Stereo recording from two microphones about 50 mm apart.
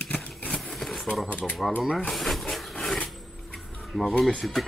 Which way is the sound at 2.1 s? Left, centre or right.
Centre.